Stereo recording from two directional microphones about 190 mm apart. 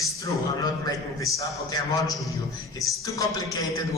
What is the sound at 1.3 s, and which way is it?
Speech, 15° left (ahead or behind).